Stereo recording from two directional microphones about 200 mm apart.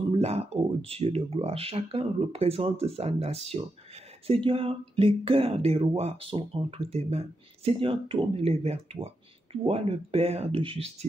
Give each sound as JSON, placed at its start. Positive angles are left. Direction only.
{"t": 0.1, "sound": "speech", "side_deg": -30}